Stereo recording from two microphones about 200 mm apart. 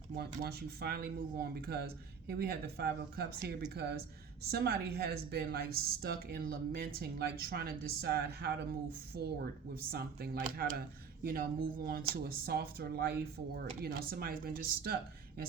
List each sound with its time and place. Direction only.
0.2 s a woman's voice: 50° right (ahead or behind)